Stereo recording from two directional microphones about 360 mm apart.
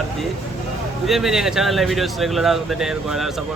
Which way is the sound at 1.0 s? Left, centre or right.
Centre.